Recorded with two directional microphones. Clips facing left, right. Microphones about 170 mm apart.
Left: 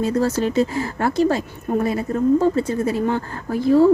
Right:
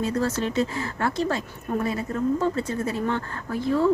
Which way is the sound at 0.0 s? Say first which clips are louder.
Left 5 dB; 40° left (ahead or behind).